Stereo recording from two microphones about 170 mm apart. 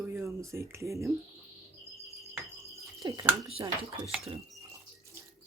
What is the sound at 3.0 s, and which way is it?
Speech, 20° right (ahead or behind).